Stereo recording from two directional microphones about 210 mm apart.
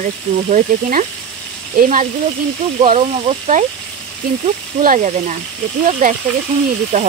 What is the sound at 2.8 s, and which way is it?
Speech, 30° right (ahead or behind).